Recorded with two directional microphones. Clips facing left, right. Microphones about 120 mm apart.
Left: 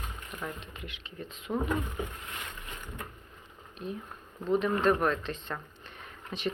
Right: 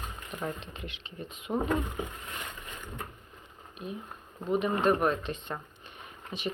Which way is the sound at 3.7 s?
10° right (ahead or behind).